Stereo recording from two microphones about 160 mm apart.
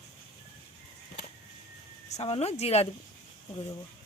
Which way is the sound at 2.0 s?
40° left (ahead or behind).